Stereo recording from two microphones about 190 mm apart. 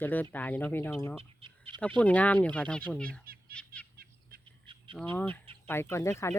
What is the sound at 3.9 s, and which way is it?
Bird, 55° right (ahead or behind).